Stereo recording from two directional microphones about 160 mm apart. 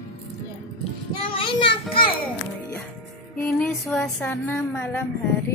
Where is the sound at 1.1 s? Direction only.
30° left (ahead or behind).